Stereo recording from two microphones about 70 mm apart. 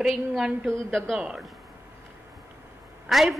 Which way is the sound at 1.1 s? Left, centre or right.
Centre.